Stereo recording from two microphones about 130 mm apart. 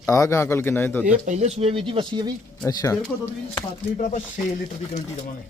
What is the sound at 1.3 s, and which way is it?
Speech, 60° right (ahead or behind).